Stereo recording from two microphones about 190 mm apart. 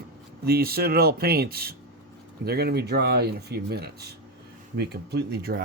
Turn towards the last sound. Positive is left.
turn(degrees=-55)  # may be behind; listen again after turning